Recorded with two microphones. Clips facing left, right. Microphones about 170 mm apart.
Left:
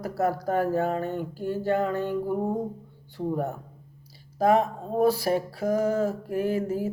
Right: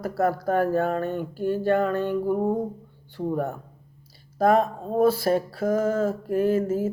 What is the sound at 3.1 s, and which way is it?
Speech, 15° left (ahead or behind).